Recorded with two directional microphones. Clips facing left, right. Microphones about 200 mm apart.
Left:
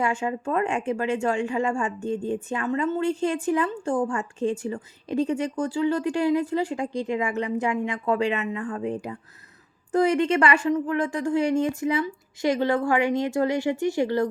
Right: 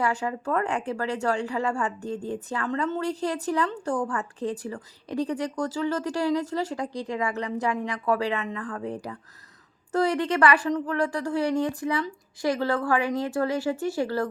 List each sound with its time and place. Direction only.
0.0 s a woman's voice: 20° left (ahead or behind)